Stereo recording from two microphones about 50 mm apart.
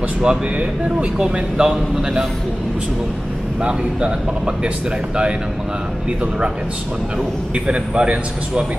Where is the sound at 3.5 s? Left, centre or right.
Right.